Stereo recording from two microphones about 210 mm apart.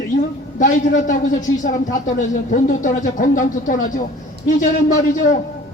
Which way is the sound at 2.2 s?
35° left (ahead or behind).